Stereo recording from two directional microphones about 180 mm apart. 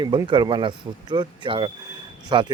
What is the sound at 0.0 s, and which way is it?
Speech, 25° right (ahead or behind).